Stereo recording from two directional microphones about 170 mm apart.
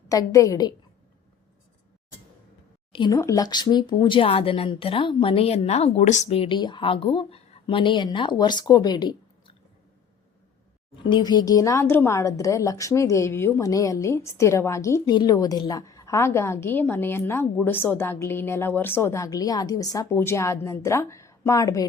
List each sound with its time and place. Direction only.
0.1 s speech: 20° left (ahead or behind)
2.9 s speech: 25° left (ahead or behind)
11.0 s a woman's voice: 25° left (ahead or behind)